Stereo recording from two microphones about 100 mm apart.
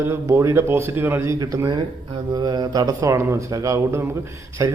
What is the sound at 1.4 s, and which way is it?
Speech, 35° right (ahead or behind).